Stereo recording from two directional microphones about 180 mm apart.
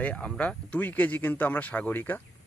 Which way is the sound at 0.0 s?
5° left (ahead or behind).